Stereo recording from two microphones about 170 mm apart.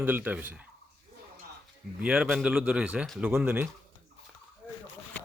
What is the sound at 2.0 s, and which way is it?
Speech, 5° right (ahead or behind).